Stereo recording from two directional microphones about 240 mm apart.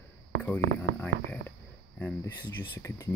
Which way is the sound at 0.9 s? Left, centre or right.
Right.